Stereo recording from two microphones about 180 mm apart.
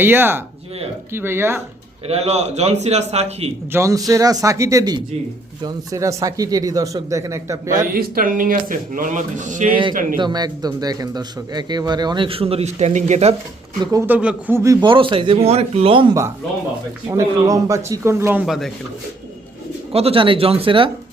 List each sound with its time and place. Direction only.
0.0 s speech: 10° right (ahead or behind)
2.0 s a man's voice: 35° right (ahead or behind)
3.7 s a man's voice: 15° right (ahead or behind)
7.9 s speech: 50° right (ahead or behind)
10.2 s a man's voice: 25° right (ahead or behind)
13.9 s a man's voice: 10° right (ahead or behind); by 16.1 s 30° right (ahead or behind)
17.1 s speech: 20° right (ahead or behind)
18.4 s speech: centre (ahead or behind)
19.9 s a man's voice: 35° right (ahead or behind)